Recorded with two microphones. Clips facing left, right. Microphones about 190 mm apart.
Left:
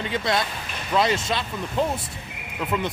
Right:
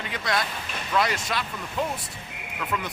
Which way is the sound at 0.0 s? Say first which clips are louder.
Left 4 dB; 25° left (ahead or behind).